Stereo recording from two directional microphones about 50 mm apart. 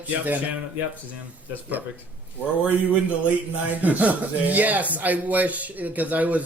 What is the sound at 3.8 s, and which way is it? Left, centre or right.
Speech, right.